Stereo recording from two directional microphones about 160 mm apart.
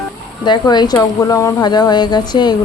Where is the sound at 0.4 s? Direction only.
30° left (ahead or behind).